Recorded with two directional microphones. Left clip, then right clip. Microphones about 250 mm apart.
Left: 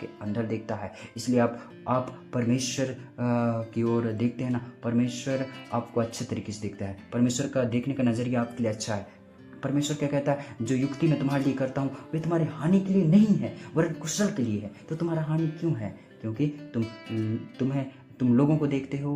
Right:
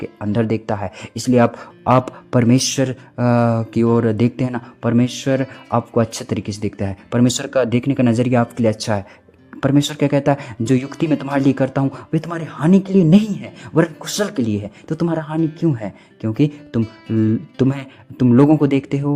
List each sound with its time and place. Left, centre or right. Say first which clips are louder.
0.2 s speech: right 12 dB; right
16.8 s speech: right 13 dB; centre
17.6 s speech: right 8 dB; right